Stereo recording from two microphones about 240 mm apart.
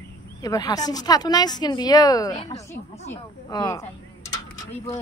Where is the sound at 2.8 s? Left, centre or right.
Left.